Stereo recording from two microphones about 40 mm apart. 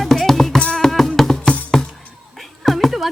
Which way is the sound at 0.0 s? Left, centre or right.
Centre.